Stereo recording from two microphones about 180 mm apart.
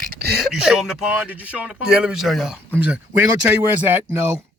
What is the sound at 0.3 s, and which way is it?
Speech, centre (ahead or behind).